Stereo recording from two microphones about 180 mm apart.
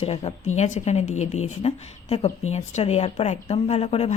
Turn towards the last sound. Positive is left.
turn(degrees=35)  # may be behind; listen again after turning